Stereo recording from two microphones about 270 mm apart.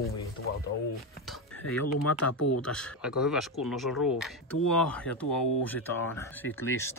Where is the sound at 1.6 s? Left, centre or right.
Left.